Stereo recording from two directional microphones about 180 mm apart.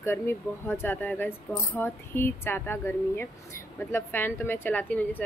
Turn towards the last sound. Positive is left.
turn(degrees=10)  # may be behind; listen again after turning